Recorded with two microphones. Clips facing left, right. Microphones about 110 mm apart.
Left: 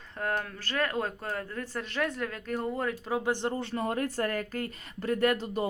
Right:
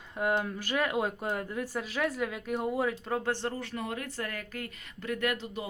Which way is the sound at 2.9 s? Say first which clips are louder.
Left 2 dB; 5° left (ahead or behind).